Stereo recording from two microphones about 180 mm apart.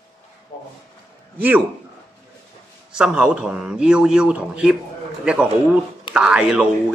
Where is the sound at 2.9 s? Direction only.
5° right (ahead or behind).